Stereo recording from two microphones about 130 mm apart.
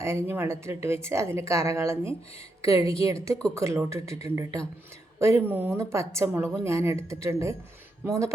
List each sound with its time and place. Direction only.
0.0 s speech: 20° right (ahead or behind)